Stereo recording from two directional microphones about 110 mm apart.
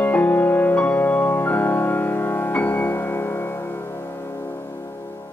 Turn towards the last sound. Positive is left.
turn(degrees=20)  # may be behind; listen again after turning